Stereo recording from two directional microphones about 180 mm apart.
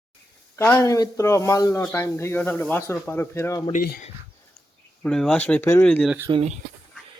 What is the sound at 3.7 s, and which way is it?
Speech, 45° left (ahead or behind).